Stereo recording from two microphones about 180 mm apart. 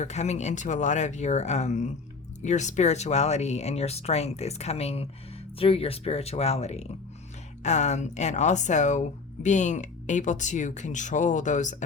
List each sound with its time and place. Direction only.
0.0 s speech: 40° left (ahead or behind)